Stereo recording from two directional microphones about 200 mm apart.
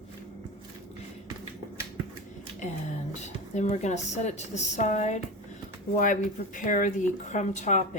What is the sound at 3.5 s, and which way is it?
A woman's voice, 35° left (ahead or behind).